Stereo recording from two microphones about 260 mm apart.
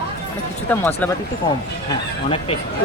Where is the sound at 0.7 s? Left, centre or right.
Centre.